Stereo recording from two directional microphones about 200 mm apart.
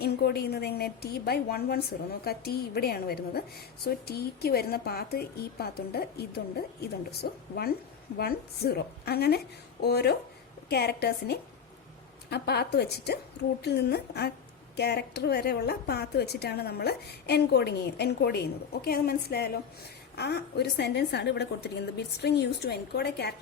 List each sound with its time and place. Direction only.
0.0 s a woman's voice: 50° left (ahead or behind)